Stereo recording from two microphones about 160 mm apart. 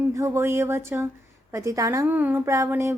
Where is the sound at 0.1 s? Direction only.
20° right (ahead or behind).